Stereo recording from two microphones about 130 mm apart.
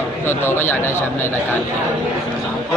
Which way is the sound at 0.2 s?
20° left (ahead or behind).